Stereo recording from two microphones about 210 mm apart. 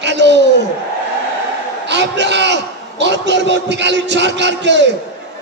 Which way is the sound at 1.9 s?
55° right (ahead or behind).